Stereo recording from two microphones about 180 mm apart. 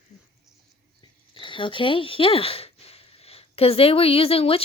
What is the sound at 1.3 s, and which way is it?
Speech, 30° left (ahead or behind).